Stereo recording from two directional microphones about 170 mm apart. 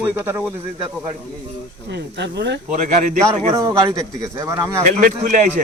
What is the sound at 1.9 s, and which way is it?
Speech, 85° right.